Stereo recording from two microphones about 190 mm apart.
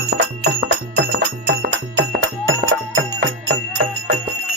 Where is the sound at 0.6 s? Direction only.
65° right (ahead or behind); by 3.2 s 80° right.